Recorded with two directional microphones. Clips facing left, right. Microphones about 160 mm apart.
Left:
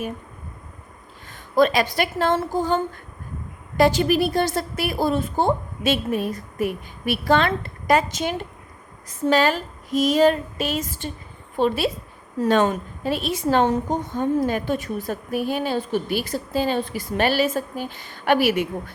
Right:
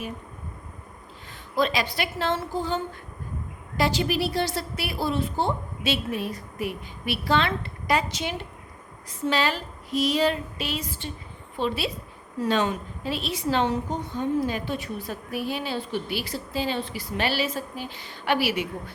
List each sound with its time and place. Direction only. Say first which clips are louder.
1.5 s a woman's voice: left 7 dB; 50° left (ahead or behind)